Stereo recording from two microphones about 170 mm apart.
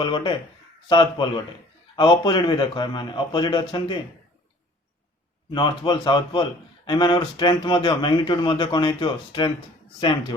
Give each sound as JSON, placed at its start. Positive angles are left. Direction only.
{"t": 0.0, "sound": "a man's voice", "side_deg": 25}
{"t": 5.5, "sound": "a man's voice", "side_deg": 25}